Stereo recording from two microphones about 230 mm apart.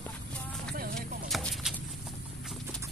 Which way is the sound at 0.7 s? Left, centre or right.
Right.